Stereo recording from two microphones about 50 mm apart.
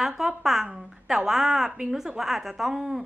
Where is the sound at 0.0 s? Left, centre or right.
Centre.